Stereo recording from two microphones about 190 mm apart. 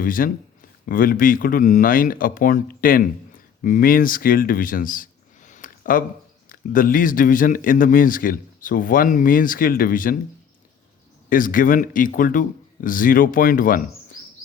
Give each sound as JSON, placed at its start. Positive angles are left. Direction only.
{"t": 0.0, "sound": "a man's voice", "side_deg": 45}
{"t": 11.3, "sound": "a man's voice", "side_deg": 45}